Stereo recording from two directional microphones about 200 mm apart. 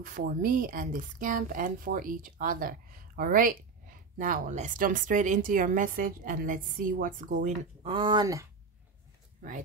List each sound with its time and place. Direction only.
0.0 s a woman's voice: 45° right (ahead or behind)
7.8 s speech: 25° right (ahead or behind)